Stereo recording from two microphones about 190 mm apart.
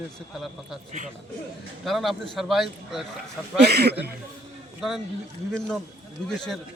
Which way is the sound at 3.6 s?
55° right (ahead or behind).